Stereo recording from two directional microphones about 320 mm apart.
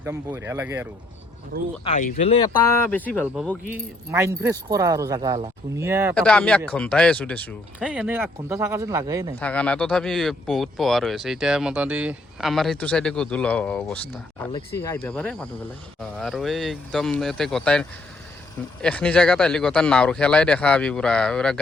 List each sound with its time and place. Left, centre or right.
0.0 s speech: centre
1.8 s speech: left
2.9 s speech: centre
3.7 s speech: centre
6.1 s speech: centre
9.4 s speech: centre